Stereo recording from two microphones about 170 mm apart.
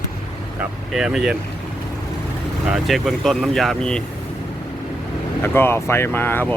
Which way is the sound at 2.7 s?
Centre (ahead or behind).